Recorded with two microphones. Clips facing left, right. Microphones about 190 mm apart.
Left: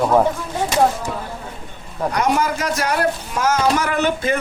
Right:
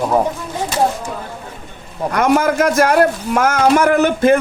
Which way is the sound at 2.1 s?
55° right (ahead or behind).